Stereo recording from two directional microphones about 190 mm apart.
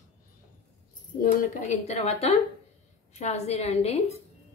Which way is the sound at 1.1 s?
45° left (ahead or behind).